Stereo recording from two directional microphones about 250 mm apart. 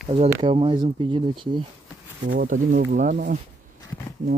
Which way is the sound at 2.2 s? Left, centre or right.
Right.